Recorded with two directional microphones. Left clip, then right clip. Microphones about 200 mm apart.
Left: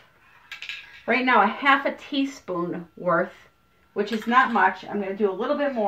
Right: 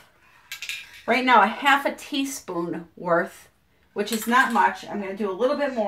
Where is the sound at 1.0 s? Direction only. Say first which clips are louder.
Right 2 dB; centre (ahead or behind).